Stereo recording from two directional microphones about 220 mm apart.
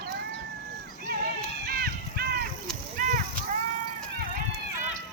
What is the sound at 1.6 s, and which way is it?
Run, 45° right (ahead or behind).